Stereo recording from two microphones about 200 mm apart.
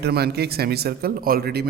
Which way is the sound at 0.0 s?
55° right (ahead or behind).